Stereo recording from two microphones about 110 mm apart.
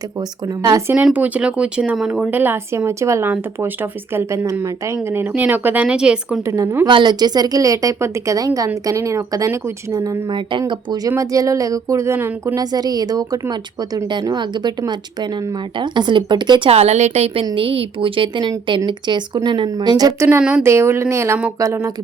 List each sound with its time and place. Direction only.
0.2 s a woman's voice: 35° right (ahead or behind)
1.0 s speech: 15° right (ahead or behind)
6.4 s speech: 30° right (ahead or behind)
6.8 s a woman's voice: 45° right (ahead or behind); by 12.5 s 20° right (ahead or behind)
12.5 s a woman's voice: 35° right (ahead or behind)
16.6 s a woman's voice: 70° right (ahead or behind)
17.5 s a woman's voice: 55° right (ahead or behind); by 20.2 s 35° right (ahead or behind)
20.7 s speech: 25° right (ahead or behind)